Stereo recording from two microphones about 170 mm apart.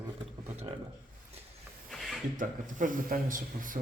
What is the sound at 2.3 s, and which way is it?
Speech, 50° right (ahead or behind).